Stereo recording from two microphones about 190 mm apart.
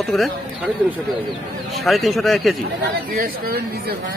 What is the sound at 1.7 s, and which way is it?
Speech, centre (ahead or behind).